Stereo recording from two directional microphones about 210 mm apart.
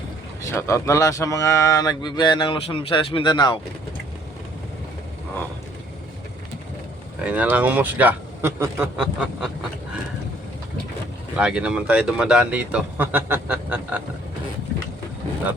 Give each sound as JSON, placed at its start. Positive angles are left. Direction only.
{"t": 0.5, "sound": "speech", "side_deg": 15}
{"t": 7.3, "sound": "speech", "side_deg": -5}
{"t": 11.3, "sound": "speech", "side_deg": -5}